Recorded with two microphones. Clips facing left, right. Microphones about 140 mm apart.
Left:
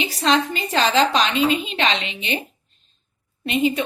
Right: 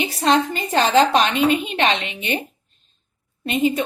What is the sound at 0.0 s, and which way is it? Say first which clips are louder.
A woman's voice: right 2 dB; 55° right (ahead or behind).